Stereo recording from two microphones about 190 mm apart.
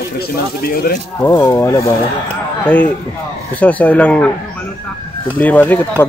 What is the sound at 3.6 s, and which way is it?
Speech, 10° left (ahead or behind).